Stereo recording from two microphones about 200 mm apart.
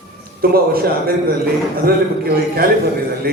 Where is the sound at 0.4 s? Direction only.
50° right (ahead or behind).